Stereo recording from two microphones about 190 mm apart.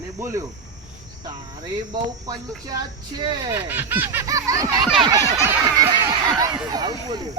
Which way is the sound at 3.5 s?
10° right (ahead or behind).